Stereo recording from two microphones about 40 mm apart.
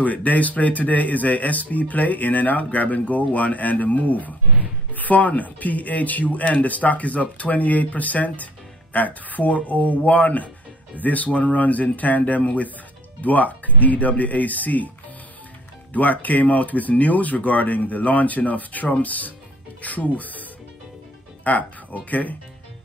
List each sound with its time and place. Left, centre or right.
0.0 s speech: left
15.9 s speech: left
21.5 s speech: left